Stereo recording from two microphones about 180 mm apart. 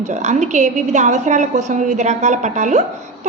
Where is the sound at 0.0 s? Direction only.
40° right (ahead or behind).